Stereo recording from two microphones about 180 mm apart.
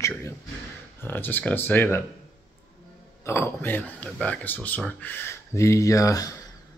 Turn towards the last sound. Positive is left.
turn(degrees=20)  # may be behind; listen again after turning